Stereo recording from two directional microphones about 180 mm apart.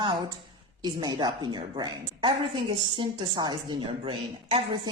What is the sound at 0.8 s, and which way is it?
A woman's voice, 25° right (ahead or behind).